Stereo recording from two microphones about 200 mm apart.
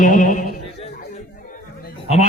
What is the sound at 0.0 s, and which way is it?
Music, 40° left (ahead or behind).